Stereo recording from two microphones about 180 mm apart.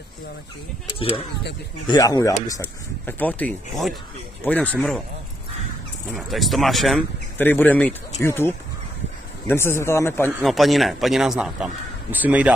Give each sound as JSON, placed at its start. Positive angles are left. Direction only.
{"t": 0.9, "sound": "speech", "side_deg": 30}
{"t": 6.1, "sound": "a man's voice", "side_deg": 0}
{"t": 7.3, "sound": "speech", "side_deg": 10}
{"t": 10.4, "sound": "a man's voice", "side_deg": 0}